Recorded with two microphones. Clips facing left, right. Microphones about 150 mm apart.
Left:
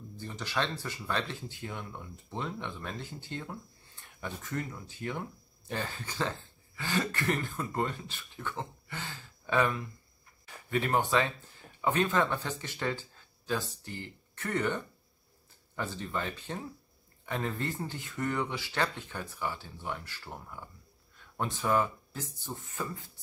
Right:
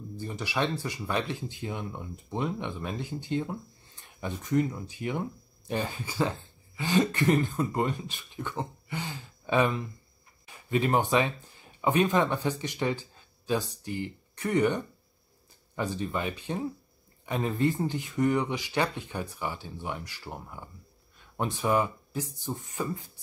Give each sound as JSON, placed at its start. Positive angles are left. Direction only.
{"t": 0.2, "sound": "speech", "side_deg": -15}